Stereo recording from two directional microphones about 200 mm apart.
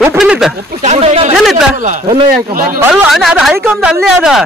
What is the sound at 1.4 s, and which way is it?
Speech, centre (ahead or behind).